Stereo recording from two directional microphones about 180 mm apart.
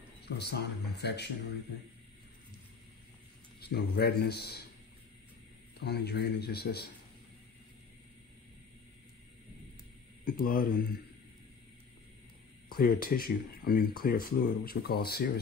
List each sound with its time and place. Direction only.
0.2 s speech: 65° left (ahead or behind)
3.6 s speech: 65° left (ahead or behind)
5.8 s speech: 65° left (ahead or behind)
10.2 s speech: 55° left (ahead or behind)
12.7 s speech: 55° left (ahead or behind)